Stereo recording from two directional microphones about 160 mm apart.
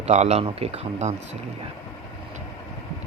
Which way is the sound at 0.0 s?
45° right (ahead or behind).